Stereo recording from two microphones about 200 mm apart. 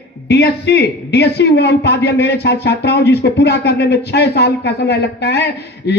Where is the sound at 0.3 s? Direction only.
55° left (ahead or behind).